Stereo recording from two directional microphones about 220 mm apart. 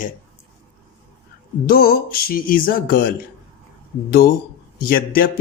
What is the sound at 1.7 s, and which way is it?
A man's voice, 45° left (ahead or behind).